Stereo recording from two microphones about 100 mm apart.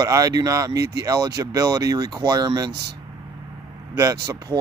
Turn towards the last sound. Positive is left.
turn(degrees=-35)  # may be behind; listen again after turning